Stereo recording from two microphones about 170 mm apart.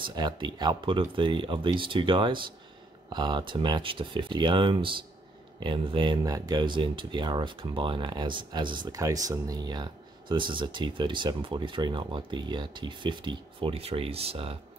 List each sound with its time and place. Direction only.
0.0 s speech: 25° right (ahead or behind)